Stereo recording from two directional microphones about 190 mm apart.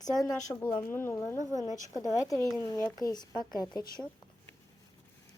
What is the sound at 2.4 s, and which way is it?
Speech, 15° left (ahead or behind).